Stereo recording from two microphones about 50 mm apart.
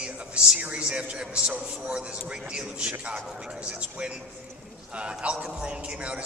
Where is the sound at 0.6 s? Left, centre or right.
Right.